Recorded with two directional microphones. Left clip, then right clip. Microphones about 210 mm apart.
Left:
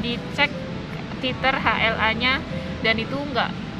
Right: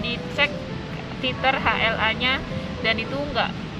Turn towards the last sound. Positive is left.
turn(degrees=5)  # may be behind; listen again after turning